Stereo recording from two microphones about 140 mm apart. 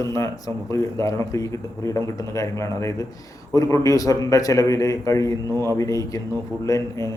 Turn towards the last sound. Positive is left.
turn(degrees=25)  # may be behind; listen again after turning